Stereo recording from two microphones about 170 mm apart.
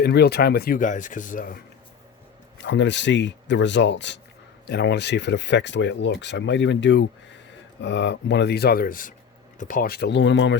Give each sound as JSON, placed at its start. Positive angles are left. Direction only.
{"t": 0.0, "sound": "speech", "side_deg": 75}
{"t": 2.6, "sound": "speech", "side_deg": 90}
{"t": 4.6, "sound": "speech", "side_deg": 80}